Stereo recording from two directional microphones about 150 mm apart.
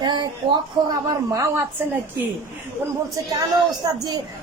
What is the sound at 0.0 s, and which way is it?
Speech, 30° right (ahead or behind).